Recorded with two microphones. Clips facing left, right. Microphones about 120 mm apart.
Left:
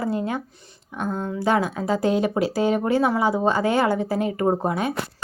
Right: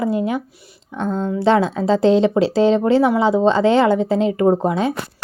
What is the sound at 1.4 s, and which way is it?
Speech, 25° right (ahead or behind).